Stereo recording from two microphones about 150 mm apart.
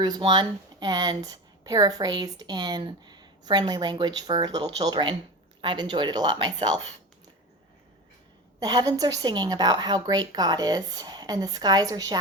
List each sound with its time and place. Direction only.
0.0 s speech: 30° right (ahead or behind)
8.5 s speech: 25° right (ahead or behind)